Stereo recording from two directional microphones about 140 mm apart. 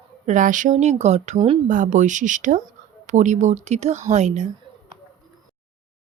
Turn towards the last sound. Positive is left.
turn(degrees=-55)  # may be behind; listen again after turning